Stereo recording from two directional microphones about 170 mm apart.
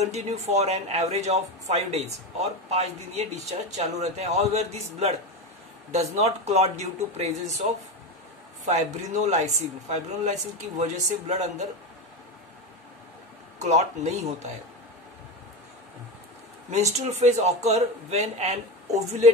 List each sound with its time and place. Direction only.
0.0 s speech: 40° right (ahead or behind)
13.6 s speech: 40° right (ahead or behind)
16.7 s speech: 40° right (ahead or behind)